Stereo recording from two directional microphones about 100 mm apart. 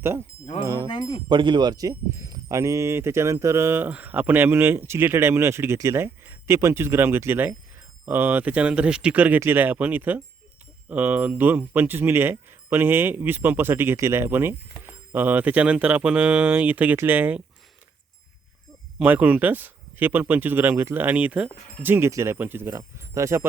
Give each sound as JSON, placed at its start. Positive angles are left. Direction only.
{"t": 0.0, "sound": "speech", "side_deg": -25}
{"t": 1.3, "sound": "speech", "side_deg": -50}
{"t": 19.0, "sound": "speech", "side_deg": -20}